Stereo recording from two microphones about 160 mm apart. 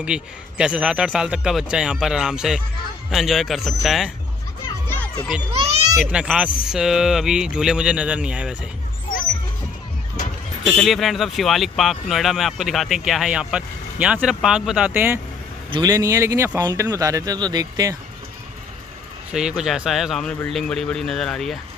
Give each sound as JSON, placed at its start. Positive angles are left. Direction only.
{"t": 0.0, "sound": "speech", "side_deg": -5}
{"t": 4.8, "sound": "music", "side_deg": 15}
{"t": 5.9, "sound": "speech", "side_deg": -5}
{"t": 10.8, "sound": "speech", "side_deg": 0}
{"t": 15.7, "sound": "speech", "side_deg": -20}
{"t": 19.3, "sound": "speech", "side_deg": -5}